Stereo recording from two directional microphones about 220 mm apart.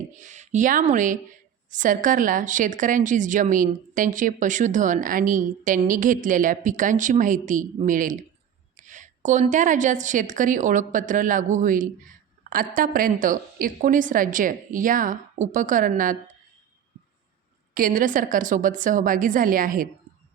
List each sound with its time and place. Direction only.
0.1 s a woman's voice: 35° right (ahead or behind)
17.7 s a woman's voice: 40° right (ahead or behind)